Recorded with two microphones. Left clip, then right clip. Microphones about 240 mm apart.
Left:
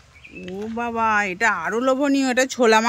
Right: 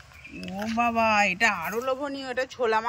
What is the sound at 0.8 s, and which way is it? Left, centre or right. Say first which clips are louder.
Speech: left 1 dB; centre.